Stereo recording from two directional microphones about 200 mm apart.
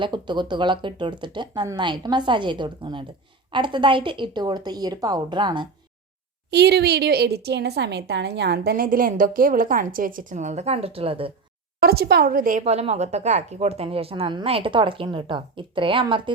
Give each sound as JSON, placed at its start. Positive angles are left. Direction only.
{"t": 0.0, "sound": "speech", "side_deg": -20}
{"t": 6.5, "sound": "a woman's voice", "side_deg": -55}
{"t": 11.8, "sound": "speech", "side_deg": -50}